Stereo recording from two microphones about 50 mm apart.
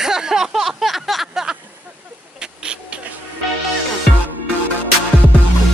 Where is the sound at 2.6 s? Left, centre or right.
Centre.